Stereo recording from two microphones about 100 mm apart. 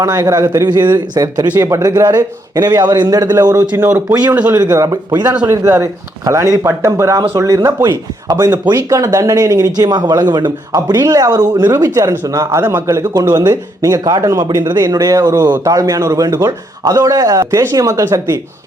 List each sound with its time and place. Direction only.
0.0 s speech: 30° right (ahead or behind)
3.7 s speech: 20° right (ahead or behind); by 10.8 s 45° right (ahead or behind)
10.9 s speech: 35° right (ahead or behind)